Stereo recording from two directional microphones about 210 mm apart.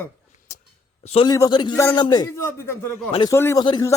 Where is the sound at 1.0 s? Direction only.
30° left (ahead or behind); by 2.9 s 10° left (ahead or behind).